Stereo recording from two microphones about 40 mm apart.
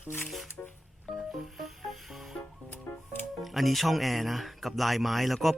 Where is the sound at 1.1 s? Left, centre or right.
Centre.